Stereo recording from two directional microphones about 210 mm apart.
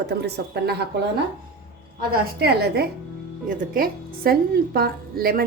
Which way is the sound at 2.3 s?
50° right (ahead or behind).